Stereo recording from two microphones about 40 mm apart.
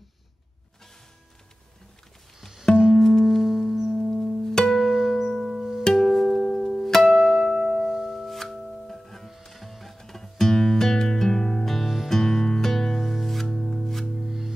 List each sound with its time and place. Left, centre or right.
2.9 s music: centre
3.3 s music: centre
3.9 s music: centre
4.5 s music: centre
4.7 s music: centre
5.1 s music: centre
5.6 s music: centre
5.9 s music: centre
7.1 s music: centre
14.2 s music: centre